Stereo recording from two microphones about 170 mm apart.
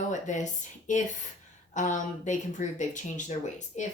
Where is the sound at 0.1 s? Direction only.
45° left (ahead or behind).